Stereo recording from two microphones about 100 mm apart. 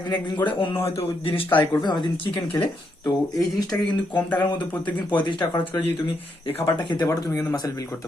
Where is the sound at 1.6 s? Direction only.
50° left (ahead or behind).